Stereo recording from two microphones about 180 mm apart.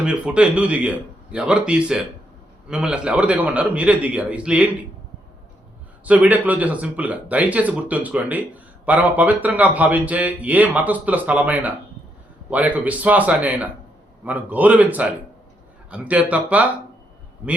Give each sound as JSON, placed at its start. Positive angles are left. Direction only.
{"t": 0.0, "sound": "a man's voice", "side_deg": -5}
{"t": 6.1, "sound": "speech", "side_deg": -10}